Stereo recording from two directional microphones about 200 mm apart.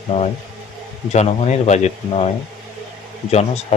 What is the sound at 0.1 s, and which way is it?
A man's voice, 30° left (ahead or behind).